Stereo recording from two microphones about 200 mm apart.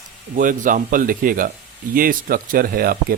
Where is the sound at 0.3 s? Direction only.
40° right (ahead or behind).